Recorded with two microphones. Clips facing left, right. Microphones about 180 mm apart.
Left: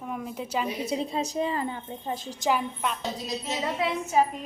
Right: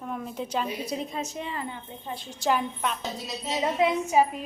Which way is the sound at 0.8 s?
30° left (ahead or behind).